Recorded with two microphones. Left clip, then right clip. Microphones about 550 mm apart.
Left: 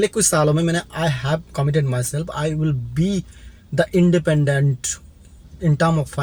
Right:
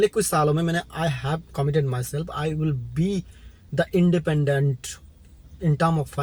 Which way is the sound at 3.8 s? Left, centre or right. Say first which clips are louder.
Left 5 dB; right.